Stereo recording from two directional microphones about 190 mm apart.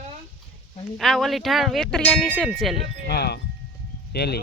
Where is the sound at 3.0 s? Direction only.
60° left (ahead or behind).